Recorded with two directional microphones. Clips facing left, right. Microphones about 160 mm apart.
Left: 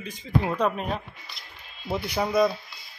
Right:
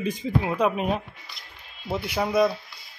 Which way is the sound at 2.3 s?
10° right (ahead or behind).